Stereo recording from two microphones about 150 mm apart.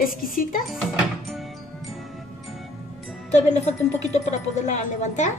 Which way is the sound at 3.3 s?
50° left (ahead or behind).